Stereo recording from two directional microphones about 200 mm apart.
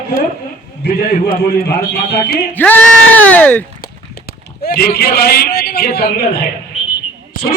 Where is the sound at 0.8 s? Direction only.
50° left (ahead or behind).